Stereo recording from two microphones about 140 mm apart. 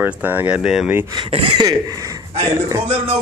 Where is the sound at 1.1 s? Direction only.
40° right (ahead or behind).